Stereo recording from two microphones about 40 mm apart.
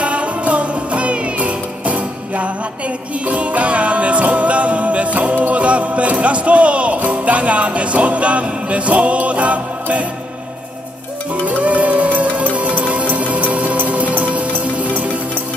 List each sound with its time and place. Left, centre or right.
0.0 s music: right
6.2 s speech: right
11.4 s music: right